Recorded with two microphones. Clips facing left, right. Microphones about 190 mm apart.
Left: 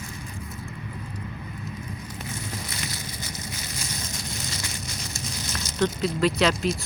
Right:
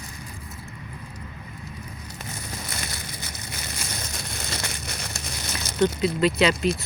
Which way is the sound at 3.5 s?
60° right (ahead or behind).